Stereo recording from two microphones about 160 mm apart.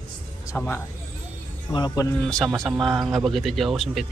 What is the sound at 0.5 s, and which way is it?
Speech, 15° left (ahead or behind).